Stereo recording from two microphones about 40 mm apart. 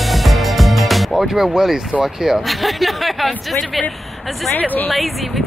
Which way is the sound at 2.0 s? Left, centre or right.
Centre.